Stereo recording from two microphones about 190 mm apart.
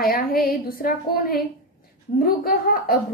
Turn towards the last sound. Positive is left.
turn(degrees=50)  # may be behind; listen again after turning